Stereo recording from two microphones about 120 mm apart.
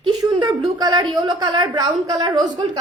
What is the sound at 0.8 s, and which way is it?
A woman's voice, 35° right (ahead or behind).